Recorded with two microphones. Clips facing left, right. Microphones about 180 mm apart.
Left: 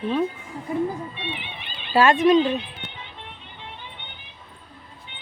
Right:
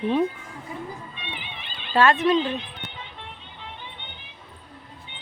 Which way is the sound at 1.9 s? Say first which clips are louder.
Left 3 dB; 15° left (ahead or behind).